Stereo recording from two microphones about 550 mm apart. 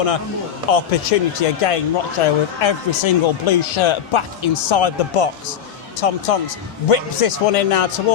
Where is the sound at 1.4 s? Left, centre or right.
Left.